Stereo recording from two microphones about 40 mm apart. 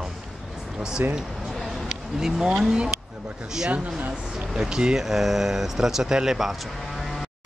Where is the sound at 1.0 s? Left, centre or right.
Right.